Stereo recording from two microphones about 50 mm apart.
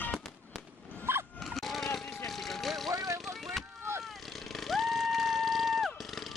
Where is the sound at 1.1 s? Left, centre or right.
Right.